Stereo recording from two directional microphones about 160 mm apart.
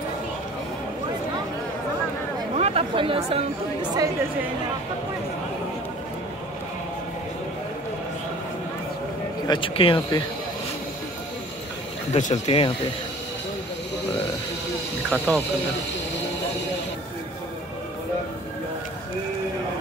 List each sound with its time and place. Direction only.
2.5 s chatter: 40° right (ahead or behind)
9.5 s speech: 35° left (ahead or behind)
12.1 s speech: 45° left (ahead or behind)
15.0 s speech: 5° left (ahead or behind)